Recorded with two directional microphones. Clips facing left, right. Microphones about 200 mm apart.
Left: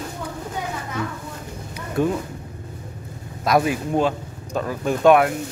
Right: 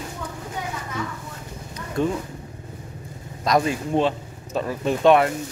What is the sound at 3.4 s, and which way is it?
Speech, 5° left (ahead or behind).